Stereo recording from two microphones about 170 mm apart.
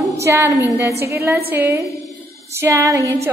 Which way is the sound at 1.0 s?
15° right (ahead or behind).